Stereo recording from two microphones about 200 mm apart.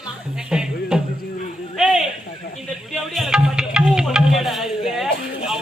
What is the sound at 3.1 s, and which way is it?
Music, centre (ahead or behind).